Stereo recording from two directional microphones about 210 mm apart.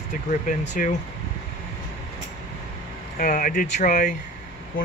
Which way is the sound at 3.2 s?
40° left (ahead or behind).